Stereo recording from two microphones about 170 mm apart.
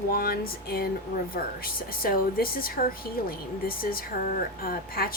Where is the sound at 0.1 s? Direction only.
60° left (ahead or behind).